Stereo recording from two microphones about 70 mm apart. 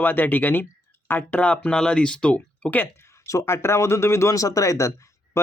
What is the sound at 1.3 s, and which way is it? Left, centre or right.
Speech, centre.